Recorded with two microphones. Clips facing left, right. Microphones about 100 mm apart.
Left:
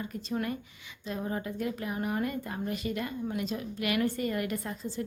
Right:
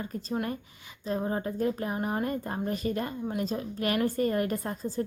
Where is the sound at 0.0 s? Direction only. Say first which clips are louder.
Right 1 dB; 35° right (ahead or behind).